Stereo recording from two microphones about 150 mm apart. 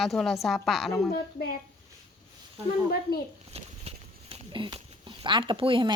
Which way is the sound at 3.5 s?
45° right (ahead or behind).